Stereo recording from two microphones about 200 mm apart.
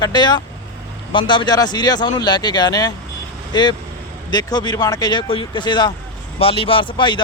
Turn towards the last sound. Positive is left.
turn(degrees=25)  # may be behind; listen again after turning